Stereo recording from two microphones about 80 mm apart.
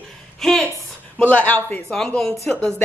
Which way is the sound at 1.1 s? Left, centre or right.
Centre.